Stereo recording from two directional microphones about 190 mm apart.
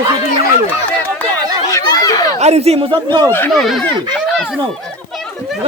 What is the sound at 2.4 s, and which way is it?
Speech, 35° right (ahead or behind).